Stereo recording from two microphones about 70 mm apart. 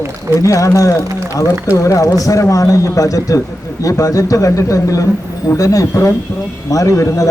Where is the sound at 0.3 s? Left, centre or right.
Left.